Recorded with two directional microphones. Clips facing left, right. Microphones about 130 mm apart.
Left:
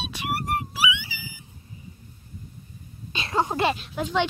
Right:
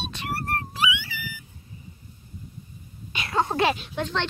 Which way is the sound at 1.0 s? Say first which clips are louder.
Right 3 dB; 20° left (ahead or behind).